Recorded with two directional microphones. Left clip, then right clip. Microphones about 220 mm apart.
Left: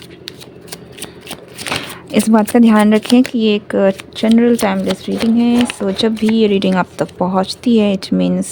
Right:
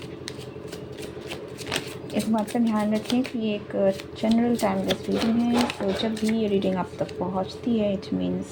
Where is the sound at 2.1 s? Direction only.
50° left (ahead or behind).